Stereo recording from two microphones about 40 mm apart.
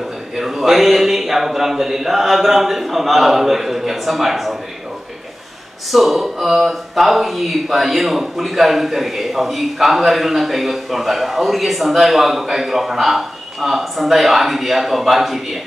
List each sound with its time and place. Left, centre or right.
0.4 s speech: centre
5.9 s speech: centre